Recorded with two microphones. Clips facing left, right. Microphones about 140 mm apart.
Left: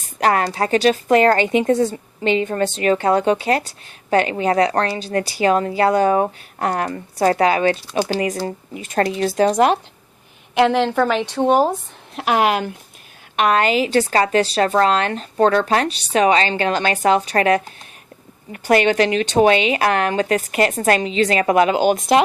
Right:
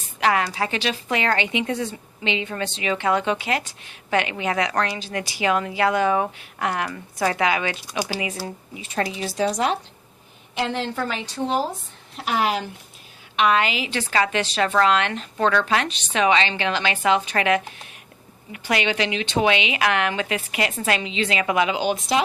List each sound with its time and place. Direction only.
0.2 s a woman's voice: 45° left (ahead or behind)
10.5 s a woman's voice: 70° left (ahead or behind)
13.3 s a woman's voice: 45° left (ahead or behind)